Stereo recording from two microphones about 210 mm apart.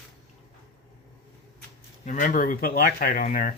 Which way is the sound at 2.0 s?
40° left (ahead or behind).